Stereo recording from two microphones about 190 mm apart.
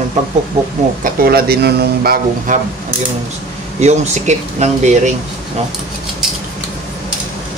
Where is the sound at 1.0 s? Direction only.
50° right (ahead or behind).